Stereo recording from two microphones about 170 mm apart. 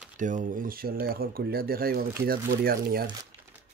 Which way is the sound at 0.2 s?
50° right (ahead or behind).